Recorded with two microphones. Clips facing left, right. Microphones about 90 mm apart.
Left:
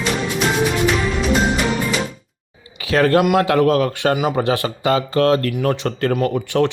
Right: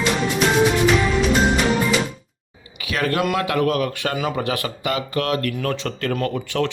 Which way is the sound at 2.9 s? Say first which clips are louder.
Left 7 dB; 35° left (ahead or behind).